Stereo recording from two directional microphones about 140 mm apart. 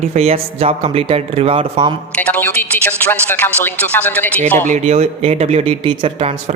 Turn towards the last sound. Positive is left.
turn(degrees=-45)  # may be behind; listen again after turning